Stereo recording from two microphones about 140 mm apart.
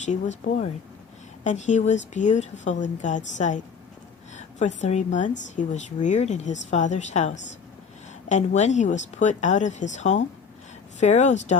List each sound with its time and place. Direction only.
0.0 s speech: 60° left (ahead or behind)